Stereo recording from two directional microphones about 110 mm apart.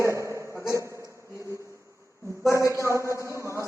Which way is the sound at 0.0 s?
25° right (ahead or behind).